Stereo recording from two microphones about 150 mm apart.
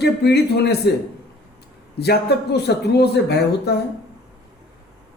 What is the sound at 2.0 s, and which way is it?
Speech, 90° left.